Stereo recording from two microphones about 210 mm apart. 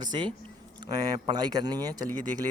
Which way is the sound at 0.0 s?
20° right (ahead or behind).